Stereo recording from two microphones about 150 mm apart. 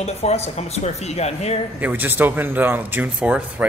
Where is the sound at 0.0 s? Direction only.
45° left (ahead or behind).